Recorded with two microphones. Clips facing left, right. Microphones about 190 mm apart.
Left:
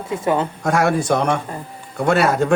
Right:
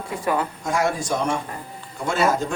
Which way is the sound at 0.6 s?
65° left (ahead or behind).